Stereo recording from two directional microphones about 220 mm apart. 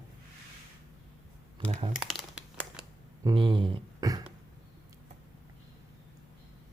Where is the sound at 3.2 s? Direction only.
20° right (ahead or behind).